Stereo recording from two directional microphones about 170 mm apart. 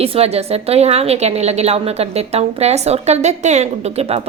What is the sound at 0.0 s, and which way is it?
A woman's voice, 35° right (ahead or behind).